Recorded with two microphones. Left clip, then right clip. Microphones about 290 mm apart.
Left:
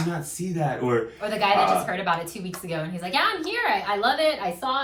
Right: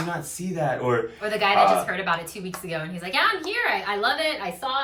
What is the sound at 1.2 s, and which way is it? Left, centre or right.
A woman's voice, centre.